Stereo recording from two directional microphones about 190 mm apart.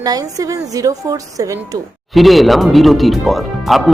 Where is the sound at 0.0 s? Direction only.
20° right (ahead or behind).